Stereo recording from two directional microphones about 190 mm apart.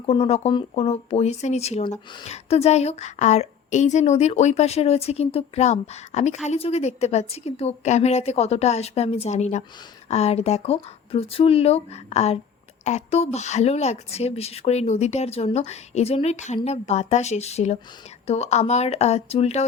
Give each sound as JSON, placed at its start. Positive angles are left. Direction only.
{"t": 0.0, "sound": "speech", "side_deg": 30}